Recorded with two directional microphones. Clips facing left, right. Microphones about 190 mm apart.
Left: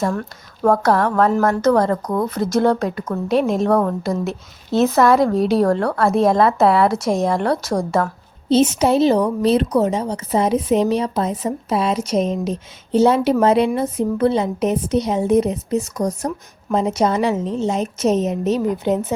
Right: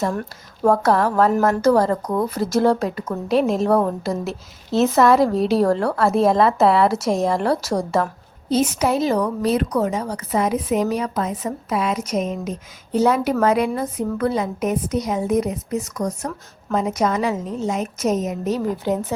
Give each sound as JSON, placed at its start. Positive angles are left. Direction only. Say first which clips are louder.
{"t": 0.6, "sound": "speech", "louder": "left 1 dB", "side_deg": -5}
{"t": 8.4, "sound": "a woman's voice", "louder": "left 4 dB", "side_deg": 25}